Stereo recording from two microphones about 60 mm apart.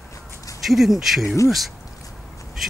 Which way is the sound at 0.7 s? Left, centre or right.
Centre.